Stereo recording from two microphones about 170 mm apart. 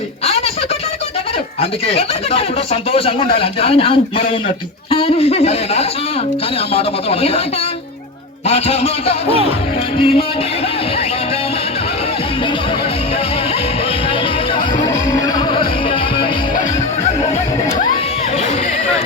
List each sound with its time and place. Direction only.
1.9 s a man's voice: 35° left (ahead or behind)
8.4 s a man's voice: 40° left (ahead or behind)